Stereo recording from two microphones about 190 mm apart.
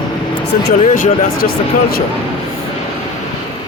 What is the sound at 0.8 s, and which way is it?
Speech, 45° left (ahead or behind).